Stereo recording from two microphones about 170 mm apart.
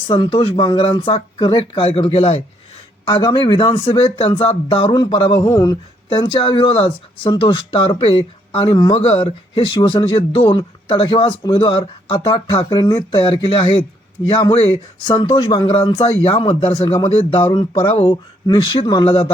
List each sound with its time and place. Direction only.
0.1 s speech: 30° left (ahead or behind)